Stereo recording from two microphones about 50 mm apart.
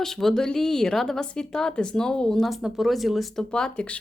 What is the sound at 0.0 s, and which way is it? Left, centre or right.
Speech, centre.